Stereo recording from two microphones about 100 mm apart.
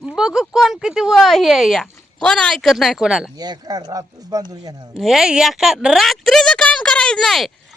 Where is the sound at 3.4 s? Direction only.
45° right (ahead or behind).